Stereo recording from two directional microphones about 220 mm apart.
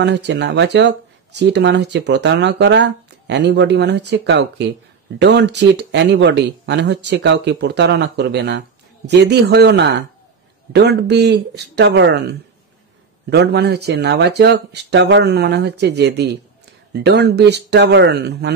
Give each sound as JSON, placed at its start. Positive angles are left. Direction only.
{"t": 0.0, "sound": "speech", "side_deg": -50}